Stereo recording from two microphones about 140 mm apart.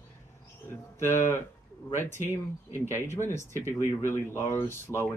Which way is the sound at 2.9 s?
20° left (ahead or behind).